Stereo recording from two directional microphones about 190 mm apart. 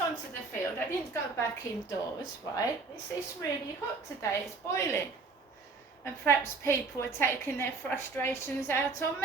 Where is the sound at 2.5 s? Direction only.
20° left (ahead or behind).